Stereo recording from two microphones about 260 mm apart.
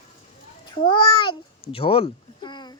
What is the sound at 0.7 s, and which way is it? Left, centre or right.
A child's voice, centre.